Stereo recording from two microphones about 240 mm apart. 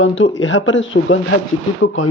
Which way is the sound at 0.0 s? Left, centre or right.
Left.